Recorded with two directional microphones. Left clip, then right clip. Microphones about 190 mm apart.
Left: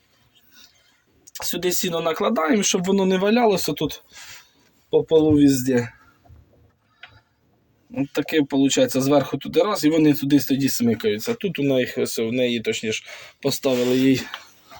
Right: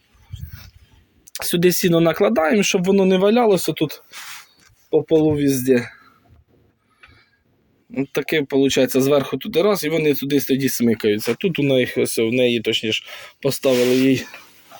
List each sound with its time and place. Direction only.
1.3 s speech: 50° right (ahead or behind)
7.9 s speech: 45° right (ahead or behind)
13.9 s speech: 15° right (ahead or behind)